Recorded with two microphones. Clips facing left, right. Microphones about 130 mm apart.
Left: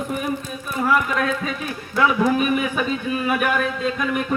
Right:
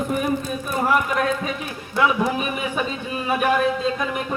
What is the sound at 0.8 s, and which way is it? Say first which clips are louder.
A man's voice: left 1 dB; 30° right (ahead or behind).